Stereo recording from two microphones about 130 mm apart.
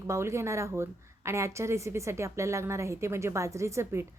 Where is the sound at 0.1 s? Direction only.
20° right (ahead or behind).